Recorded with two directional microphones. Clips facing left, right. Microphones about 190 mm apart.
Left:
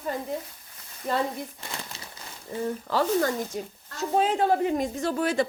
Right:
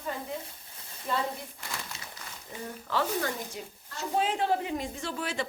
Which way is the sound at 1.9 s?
30° left (ahead or behind).